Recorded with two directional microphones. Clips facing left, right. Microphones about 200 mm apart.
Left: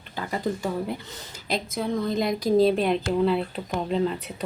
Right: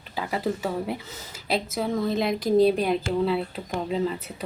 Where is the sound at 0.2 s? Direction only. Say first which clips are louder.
Right 1 dB; 5° right (ahead or behind).